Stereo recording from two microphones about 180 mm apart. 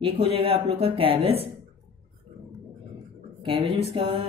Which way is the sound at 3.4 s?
30° right (ahead or behind).